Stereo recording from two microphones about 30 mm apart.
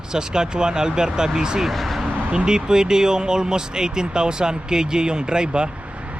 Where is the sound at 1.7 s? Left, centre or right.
Centre.